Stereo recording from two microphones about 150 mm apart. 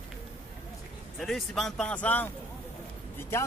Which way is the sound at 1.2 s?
Centre (ahead or behind).